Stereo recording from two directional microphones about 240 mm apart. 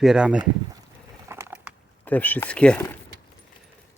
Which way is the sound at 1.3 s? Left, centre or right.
Centre.